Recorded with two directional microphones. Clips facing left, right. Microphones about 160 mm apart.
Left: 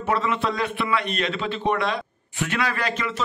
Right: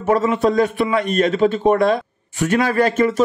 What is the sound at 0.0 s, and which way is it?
A man's voice, 45° right (ahead or behind).